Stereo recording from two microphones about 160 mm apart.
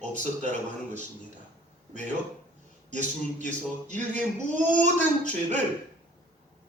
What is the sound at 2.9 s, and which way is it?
Speech, 50° right (ahead or behind).